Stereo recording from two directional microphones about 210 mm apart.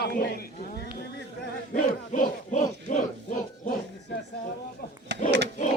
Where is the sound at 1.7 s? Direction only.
35° left (ahead or behind).